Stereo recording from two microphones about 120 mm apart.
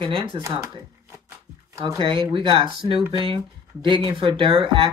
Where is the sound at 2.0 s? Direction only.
50° right (ahead or behind).